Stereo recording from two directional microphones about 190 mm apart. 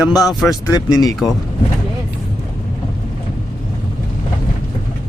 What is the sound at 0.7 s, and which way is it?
Speech, 20° left (ahead or behind).